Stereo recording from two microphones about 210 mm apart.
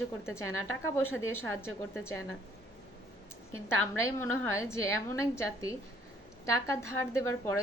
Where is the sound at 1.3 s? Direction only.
10° left (ahead or behind).